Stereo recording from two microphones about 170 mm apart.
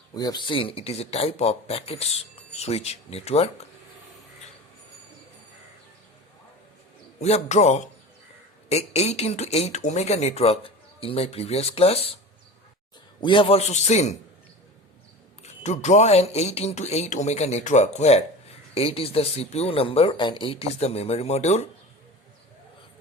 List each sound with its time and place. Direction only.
0.1 s speech: 25° left (ahead or behind)
7.2 s a man's voice: 40° left (ahead or behind)
13.2 s speech: 30° left (ahead or behind)
15.6 s speech: 40° left (ahead or behind)